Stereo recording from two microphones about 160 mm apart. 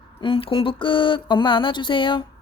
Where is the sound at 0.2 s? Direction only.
35° left (ahead or behind).